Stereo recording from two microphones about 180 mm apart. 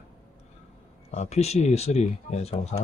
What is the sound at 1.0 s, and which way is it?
Speech, 40° left (ahead or behind).